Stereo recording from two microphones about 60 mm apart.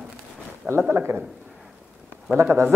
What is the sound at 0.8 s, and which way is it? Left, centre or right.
Speech, right.